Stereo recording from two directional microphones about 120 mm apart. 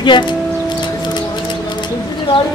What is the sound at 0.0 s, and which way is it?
Speech, 40° left (ahead or behind).